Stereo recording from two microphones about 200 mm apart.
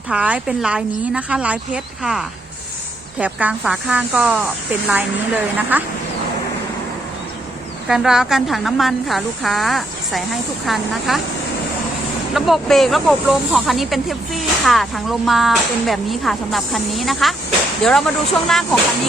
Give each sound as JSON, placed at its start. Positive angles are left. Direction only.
{"t": 0.1, "sound": "a woman's voice", "side_deg": -5}
{"t": 7.9, "sound": "speech", "side_deg": 0}
{"t": 12.3, "sound": "speech", "side_deg": 0}